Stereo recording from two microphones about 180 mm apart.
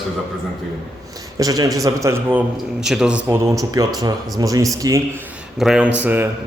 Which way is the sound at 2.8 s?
5° right (ahead or behind).